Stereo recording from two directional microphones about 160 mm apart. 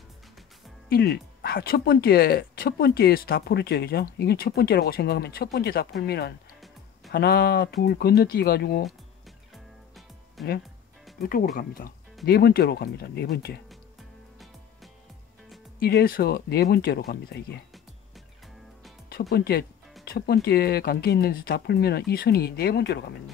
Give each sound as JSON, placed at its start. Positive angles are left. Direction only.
{"t": 0.8, "sound": "speech", "side_deg": 75}
{"t": 7.1, "sound": "speech", "side_deg": 75}
{"t": 10.4, "sound": "music", "side_deg": 0}
{"t": 11.1, "sound": "speech", "side_deg": 70}
{"t": 12.3, "sound": "speech", "side_deg": 75}
{"t": 15.8, "sound": "speech", "side_deg": 70}
{"t": 19.0, "sound": "speech", "side_deg": 80}